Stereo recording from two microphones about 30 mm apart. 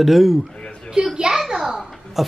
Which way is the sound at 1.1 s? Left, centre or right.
Right.